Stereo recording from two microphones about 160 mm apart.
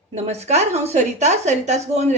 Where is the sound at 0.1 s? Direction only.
45° right (ahead or behind).